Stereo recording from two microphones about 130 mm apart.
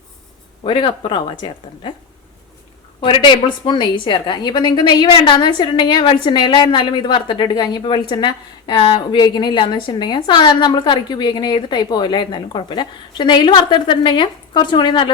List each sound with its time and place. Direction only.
0.6 s a woman's voice: 40° left (ahead or behind)
3.0 s a woman's voice: 40° left (ahead or behind)